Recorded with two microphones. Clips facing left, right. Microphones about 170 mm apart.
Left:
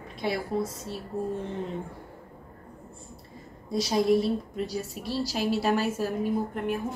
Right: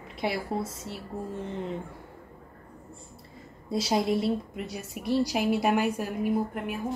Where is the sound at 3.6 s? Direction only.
25° right (ahead or behind).